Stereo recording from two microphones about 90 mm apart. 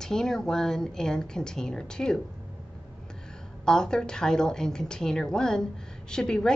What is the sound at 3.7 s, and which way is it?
A woman's voice, 10° left (ahead or behind).